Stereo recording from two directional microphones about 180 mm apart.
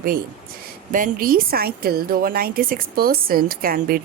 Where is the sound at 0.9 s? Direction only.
50° right (ahead or behind).